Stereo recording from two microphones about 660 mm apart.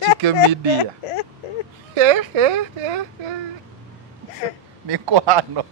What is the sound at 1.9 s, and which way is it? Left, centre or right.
Speech, right.